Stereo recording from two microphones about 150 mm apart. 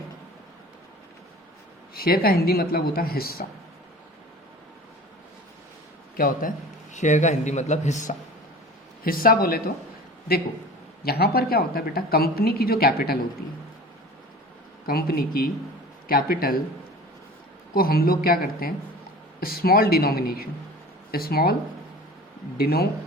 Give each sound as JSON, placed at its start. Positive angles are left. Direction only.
{"t": 2.0, "sound": "speech", "side_deg": 85}
{"t": 6.1, "sound": "speech", "side_deg": 75}
{"t": 6.9, "sound": "speech", "side_deg": 50}
{"t": 9.0, "sound": "speech", "side_deg": 70}
{"t": 11.0, "sound": "a woman's voice", "side_deg": 90}
{"t": 14.8, "sound": "speech", "side_deg": 80}
{"t": 17.7, "sound": "a woman's voice", "side_deg": 80}
{"t": 22.5, "sound": "a woman's voice", "side_deg": 90}